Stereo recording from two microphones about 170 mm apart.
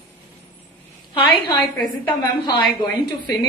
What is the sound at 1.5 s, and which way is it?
Speech, 25° left (ahead or behind).